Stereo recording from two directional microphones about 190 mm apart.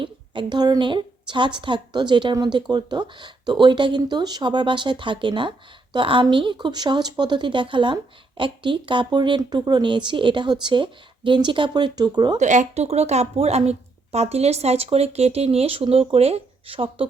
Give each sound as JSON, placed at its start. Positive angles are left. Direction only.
{"t": 0.0, "sound": "a woman's voice", "side_deg": -25}
{"t": 12.4, "sound": "a woman's voice", "side_deg": -40}